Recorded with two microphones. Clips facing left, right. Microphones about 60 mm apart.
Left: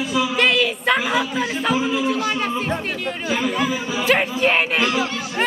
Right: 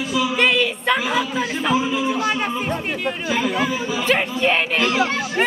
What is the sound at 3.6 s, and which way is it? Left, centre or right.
Speech, centre.